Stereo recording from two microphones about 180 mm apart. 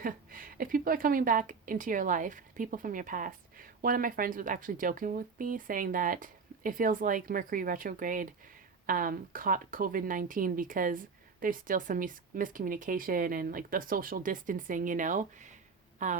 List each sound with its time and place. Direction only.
0.0 s speech: 50° right (ahead or behind)